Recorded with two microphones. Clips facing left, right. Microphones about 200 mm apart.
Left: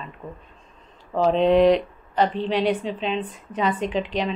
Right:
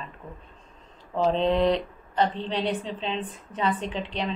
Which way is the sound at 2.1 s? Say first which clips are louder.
Left 4 dB; 75° left (ahead or behind).